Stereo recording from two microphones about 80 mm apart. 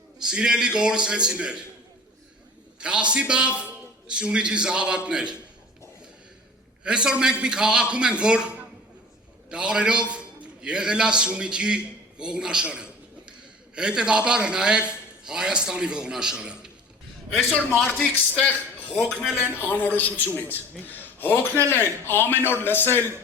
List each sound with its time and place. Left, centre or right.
0.3 s a man's voice: centre
2.8 s a man's voice: centre
6.8 s a man's voice: centre
9.5 s a man's voice: centre
17.8 s a man's voice: centre
19.5 s a man's voice: left